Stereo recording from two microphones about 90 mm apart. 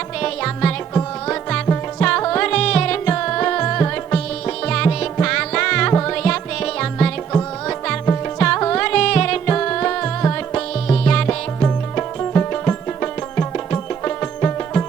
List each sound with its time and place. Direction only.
0.2 s music: 10° left (ahead or behind)